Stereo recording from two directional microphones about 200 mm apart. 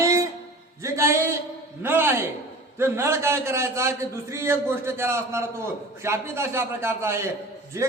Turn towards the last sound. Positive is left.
turn(degrees=-15)  # may be behind; listen again after turning